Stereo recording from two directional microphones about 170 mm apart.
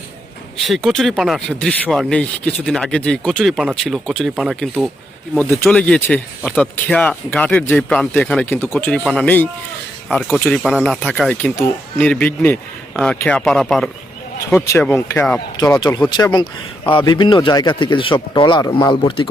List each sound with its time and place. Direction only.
0.6 s speech: centre (ahead or behind)
14.5 s speech: 15° left (ahead or behind)
15.5 s speech: 25° left (ahead or behind)